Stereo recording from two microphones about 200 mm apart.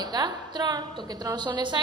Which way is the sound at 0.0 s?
20° right (ahead or behind).